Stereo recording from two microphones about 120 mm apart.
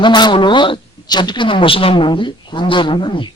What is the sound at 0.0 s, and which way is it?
Speech, 40° left (ahead or behind).